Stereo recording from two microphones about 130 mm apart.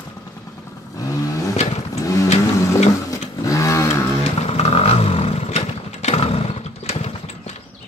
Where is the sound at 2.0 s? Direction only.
25° left (ahead or behind).